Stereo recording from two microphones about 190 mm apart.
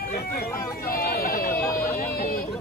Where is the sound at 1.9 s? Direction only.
50° left (ahead or behind).